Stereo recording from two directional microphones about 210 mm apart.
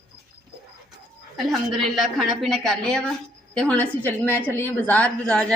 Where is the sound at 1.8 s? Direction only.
Centre (ahead or behind).